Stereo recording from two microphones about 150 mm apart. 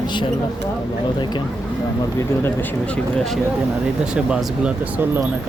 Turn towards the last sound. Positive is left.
turn(degrees=-10)  # may be behind; listen again after turning